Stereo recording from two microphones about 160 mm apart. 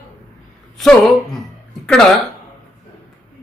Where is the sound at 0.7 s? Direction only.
Centre (ahead or behind).